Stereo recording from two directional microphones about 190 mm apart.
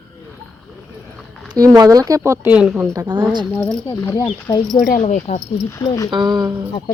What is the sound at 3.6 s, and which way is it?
Speech, 5° left (ahead or behind).